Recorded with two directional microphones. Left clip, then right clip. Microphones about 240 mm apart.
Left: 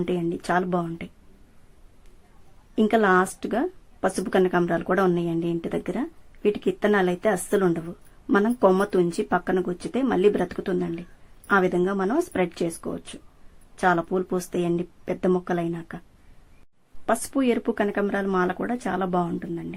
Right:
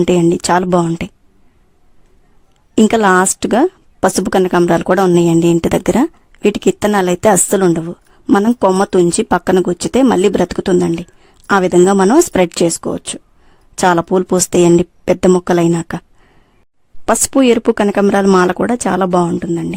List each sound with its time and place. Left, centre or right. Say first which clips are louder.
0.0 s speech: right 15 dB; right
2.7 s a woman's voice: right 9 dB; right
17.1 s speech: right 12 dB; right